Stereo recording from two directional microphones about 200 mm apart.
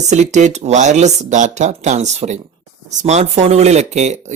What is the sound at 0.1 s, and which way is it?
A man's voice, 35° right (ahead or behind).